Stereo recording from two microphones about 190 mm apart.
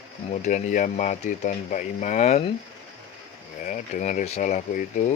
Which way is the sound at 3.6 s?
40° left (ahead or behind).